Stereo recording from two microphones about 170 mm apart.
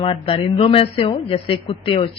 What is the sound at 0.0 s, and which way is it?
A woman's voice, 35° left (ahead or behind).